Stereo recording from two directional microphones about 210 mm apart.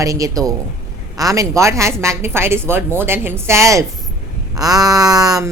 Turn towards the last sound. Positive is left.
turn(degrees=-15)  # may be behind; listen again after turning